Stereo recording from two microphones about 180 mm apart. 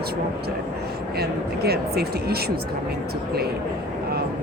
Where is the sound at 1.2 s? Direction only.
60° right (ahead or behind).